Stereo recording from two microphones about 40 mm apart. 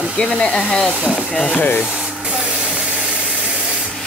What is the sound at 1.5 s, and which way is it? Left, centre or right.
Speech, left.